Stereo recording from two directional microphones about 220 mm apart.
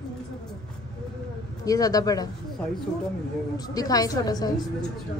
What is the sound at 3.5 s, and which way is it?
A woman's voice, 15° left (ahead or behind).